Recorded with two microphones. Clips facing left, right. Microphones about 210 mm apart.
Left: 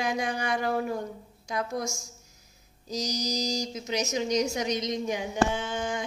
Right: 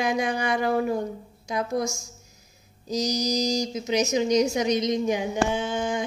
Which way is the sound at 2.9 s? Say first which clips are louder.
Right 6 dB; 20° right (ahead or behind).